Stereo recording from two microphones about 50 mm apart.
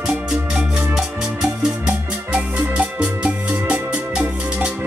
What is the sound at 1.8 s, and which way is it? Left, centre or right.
Music, right.